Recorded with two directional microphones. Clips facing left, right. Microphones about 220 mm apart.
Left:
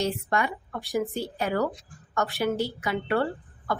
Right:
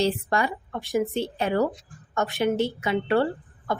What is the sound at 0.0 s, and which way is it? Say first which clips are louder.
A woman's voice: right 3 dB; 35° right (ahead or behind).